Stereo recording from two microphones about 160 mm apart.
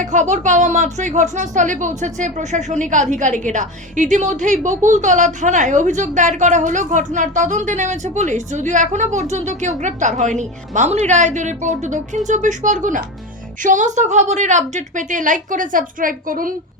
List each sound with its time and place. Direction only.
0.0 s a woman's voice: 50° right (ahead or behind)